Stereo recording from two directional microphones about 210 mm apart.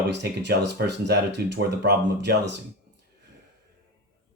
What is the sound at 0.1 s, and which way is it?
Speech, 55° right (ahead or behind).